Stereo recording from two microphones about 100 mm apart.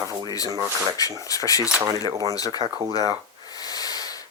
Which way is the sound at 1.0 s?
35° left (ahead or behind).